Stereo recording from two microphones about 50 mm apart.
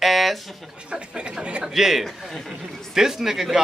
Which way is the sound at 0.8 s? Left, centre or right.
Centre.